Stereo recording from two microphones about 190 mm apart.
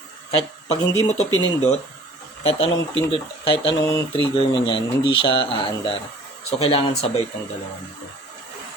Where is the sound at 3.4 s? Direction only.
30° left (ahead or behind).